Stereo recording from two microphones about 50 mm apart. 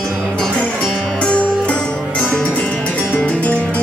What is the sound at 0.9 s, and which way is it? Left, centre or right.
Music, left.